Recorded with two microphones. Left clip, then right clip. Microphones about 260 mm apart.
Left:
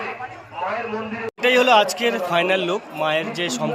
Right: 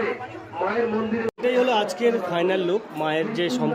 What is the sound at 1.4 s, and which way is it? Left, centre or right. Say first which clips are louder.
Speech: left 7 dB; centre.